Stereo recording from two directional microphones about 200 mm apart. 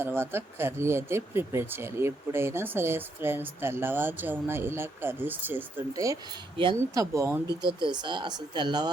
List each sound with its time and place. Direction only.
0.0 s speech: 10° right (ahead or behind)